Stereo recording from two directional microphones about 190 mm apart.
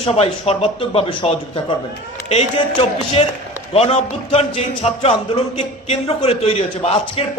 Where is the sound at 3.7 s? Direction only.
30° left (ahead or behind).